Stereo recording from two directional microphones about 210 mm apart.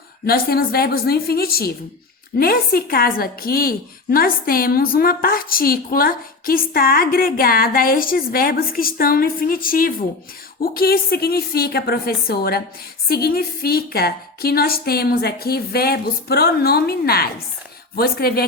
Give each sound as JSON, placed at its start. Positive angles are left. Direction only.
{"t": 0.3, "sound": "a woman's voice", "side_deg": 45}